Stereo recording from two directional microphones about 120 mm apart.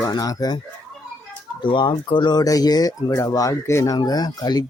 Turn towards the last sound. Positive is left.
turn(degrees=35)  # may be behind; listen again after turning